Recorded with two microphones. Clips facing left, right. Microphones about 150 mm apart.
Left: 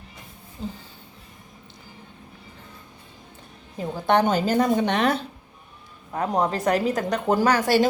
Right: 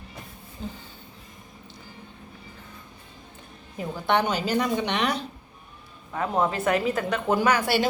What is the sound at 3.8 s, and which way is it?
Speech, 40° left (ahead or behind).